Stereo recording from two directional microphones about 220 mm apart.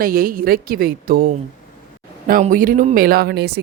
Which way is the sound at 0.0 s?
40° right (ahead or behind).